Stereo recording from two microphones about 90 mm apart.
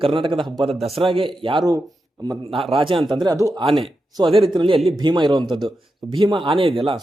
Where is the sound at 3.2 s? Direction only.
40° right (ahead or behind).